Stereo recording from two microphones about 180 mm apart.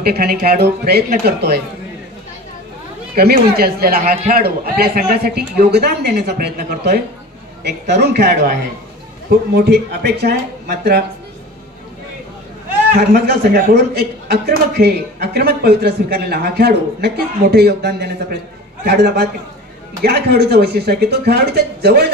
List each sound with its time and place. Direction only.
0.0 s a man's voice: 60° right (ahead or behind)
3.2 s a man's voice: 60° right (ahead or behind)
7.6 s a man's voice: 70° right (ahead or behind)
13.1 s a man's voice: 60° right (ahead or behind)